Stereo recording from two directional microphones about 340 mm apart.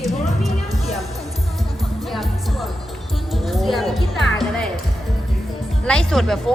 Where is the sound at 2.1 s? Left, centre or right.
Centre.